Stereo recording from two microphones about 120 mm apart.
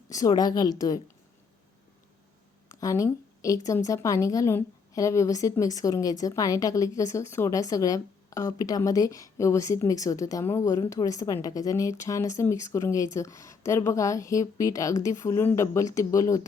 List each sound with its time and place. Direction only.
0.1 s a woman's voice: 30° left (ahead or behind)
2.6 s a woman's voice: 30° left (ahead or behind)